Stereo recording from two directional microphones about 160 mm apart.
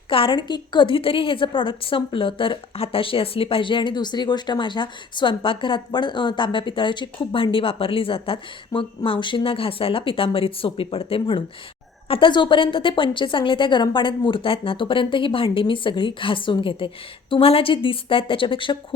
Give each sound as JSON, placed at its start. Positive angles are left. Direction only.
{"t": 0.1, "sound": "a woman's voice", "side_deg": 30}